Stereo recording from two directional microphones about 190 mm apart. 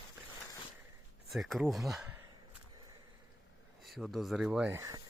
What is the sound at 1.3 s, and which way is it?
Speech, centre (ahead or behind).